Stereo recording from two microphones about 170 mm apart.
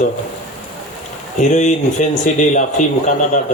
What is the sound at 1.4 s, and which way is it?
A man's voice, 45° left (ahead or behind).